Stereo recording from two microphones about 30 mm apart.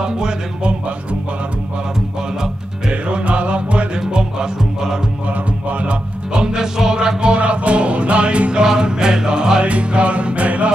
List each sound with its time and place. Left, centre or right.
2.9 s music: right
4.1 s music: right
5.7 s music: right
6.3 s music: right
8.6 s music: right
9.6 s music: right